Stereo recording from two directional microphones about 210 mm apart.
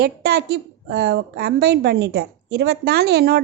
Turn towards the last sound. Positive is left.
turn(degrees=-50)  # may be behind; listen again after turning